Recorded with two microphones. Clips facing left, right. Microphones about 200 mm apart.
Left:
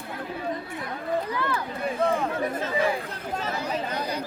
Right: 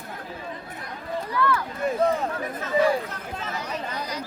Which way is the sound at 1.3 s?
20° left (ahead or behind).